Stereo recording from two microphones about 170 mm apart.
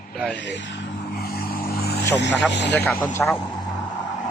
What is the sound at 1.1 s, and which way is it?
Vehicle, 65° left (ahead or behind).